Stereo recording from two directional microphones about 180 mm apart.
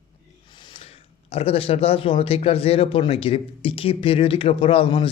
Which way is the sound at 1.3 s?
30° left (ahead or behind).